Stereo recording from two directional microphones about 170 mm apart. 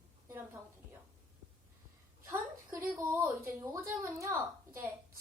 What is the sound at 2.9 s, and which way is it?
A woman's voice, 5° right (ahead or behind).